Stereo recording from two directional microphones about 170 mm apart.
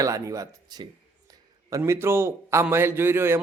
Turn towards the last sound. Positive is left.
turn(degrees=-15)  # may be behind; listen again after turning